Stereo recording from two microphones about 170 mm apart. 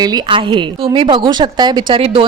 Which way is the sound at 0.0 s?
20° right (ahead or behind).